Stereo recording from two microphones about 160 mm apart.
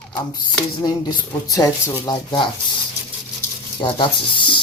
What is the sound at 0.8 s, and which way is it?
Speech, 25° left (ahead or behind).